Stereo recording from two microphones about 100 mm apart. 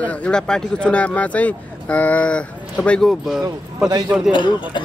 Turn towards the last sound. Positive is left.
turn(degrees=50)  # may be behind; listen again after turning